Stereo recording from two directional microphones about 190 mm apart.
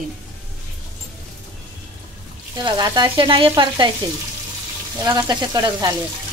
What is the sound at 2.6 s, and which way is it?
Frying, 25° right (ahead or behind).